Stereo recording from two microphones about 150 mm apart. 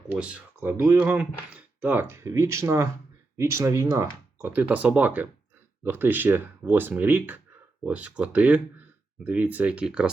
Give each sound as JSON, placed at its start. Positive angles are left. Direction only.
{"t": 0.1, "sound": "speech", "side_deg": -10}